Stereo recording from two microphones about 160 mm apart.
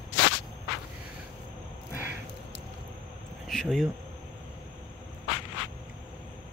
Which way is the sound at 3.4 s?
5° left (ahead or behind).